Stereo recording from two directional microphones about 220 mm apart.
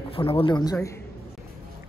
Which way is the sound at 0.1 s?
25° left (ahead or behind).